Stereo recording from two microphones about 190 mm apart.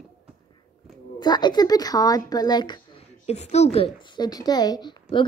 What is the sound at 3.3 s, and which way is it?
Speech, 35° left (ahead or behind).